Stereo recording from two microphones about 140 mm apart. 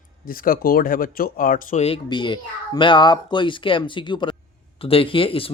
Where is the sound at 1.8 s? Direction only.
40° left (ahead or behind).